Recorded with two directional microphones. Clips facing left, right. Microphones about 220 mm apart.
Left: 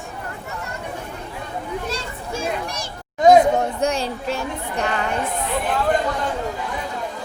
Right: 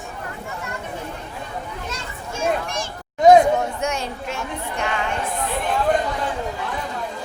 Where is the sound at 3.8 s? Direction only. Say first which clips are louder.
Left 4 dB; 35° left (ahead or behind).